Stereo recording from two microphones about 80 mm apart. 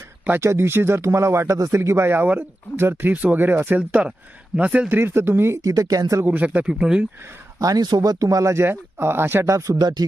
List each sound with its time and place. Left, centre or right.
0.3 s speech: right
5.6 s speech: right
6.2 s speech: right
7.6 s speech: right
8.5 s speech: right
9.7 s speech: right